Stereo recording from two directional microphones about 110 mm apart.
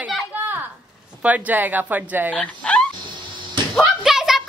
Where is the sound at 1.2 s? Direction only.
15° right (ahead or behind).